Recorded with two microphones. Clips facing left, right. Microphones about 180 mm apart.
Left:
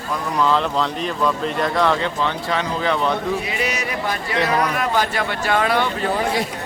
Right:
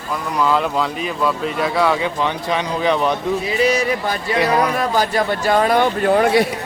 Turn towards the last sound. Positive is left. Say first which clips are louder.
# right 7 dB
turn(degrees=-70)  # may be behind; listen again after turning